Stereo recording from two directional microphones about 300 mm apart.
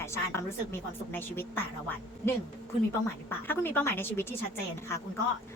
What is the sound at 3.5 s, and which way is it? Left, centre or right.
Speech, centre.